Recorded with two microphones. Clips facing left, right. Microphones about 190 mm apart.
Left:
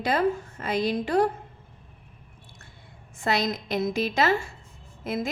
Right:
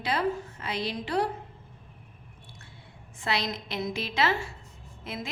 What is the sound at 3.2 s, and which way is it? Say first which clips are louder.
A woman's voice: left 5 dB; 45° left (ahead or behind).